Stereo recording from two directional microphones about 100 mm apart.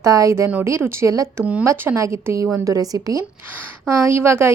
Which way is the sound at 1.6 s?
25° right (ahead or behind).